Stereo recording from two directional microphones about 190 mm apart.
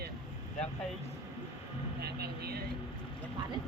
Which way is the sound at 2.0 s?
55° right (ahead or behind).